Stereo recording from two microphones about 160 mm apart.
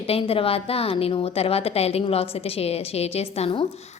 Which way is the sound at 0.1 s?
35° left (ahead or behind).